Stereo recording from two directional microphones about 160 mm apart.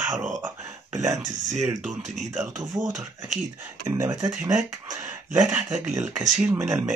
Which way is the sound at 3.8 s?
20° right (ahead or behind).